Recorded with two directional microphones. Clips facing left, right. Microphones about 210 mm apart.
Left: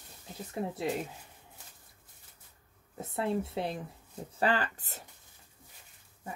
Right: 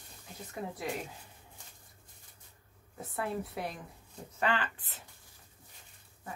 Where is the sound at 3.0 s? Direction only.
25° left (ahead or behind).